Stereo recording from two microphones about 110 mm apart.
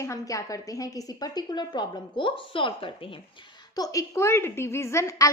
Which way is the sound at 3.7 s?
35° left (ahead or behind).